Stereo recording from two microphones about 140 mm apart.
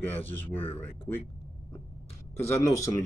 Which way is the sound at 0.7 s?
15° left (ahead or behind).